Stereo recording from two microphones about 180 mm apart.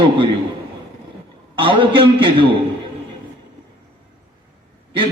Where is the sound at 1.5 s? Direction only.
30° right (ahead or behind).